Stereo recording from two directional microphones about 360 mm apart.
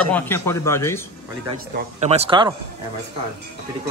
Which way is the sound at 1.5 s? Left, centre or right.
Centre.